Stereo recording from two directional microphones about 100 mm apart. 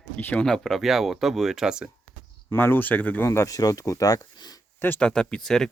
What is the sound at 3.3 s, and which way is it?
Speech, 35° left (ahead or behind).